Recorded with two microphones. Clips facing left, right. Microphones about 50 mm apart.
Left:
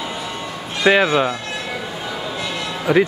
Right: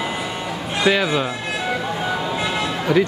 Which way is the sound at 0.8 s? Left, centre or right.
Left.